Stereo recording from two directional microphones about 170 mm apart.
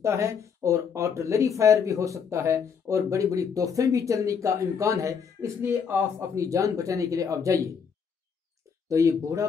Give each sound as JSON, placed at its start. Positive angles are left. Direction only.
{"t": 0.0, "sound": "speech", "side_deg": -15}
{"t": 8.8, "sound": "speech", "side_deg": -20}